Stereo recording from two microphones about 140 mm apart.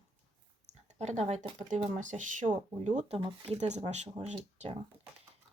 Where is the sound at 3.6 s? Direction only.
55° right (ahead or behind).